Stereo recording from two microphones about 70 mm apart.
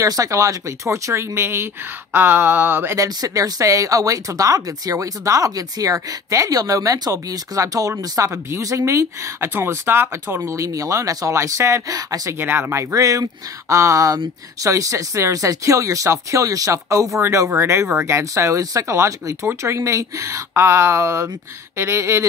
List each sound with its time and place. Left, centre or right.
0.0 s speech: right
3.0 s speech: right
9.5 s speech: right
12.4 s speech: right
12.9 s speech: right